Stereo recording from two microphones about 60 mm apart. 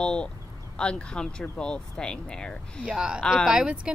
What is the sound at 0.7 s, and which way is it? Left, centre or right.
Speech, centre.